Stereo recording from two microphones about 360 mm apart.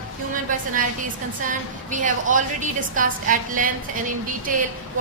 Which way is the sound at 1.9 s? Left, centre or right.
Right.